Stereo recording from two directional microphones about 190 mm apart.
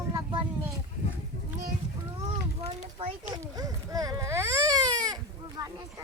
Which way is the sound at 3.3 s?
20° right (ahead or behind).